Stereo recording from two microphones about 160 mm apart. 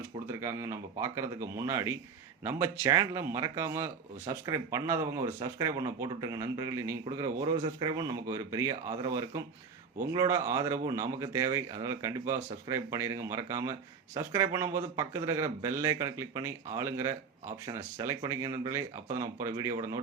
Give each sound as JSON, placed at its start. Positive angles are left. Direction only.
{"t": 0.3, "sound": "speech", "side_deg": -15}